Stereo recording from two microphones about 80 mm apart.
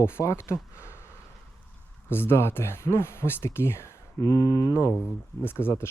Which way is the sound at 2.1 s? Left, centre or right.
Left.